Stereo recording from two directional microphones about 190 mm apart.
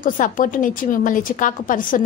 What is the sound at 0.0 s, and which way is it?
A woman's voice, 45° left (ahead or behind).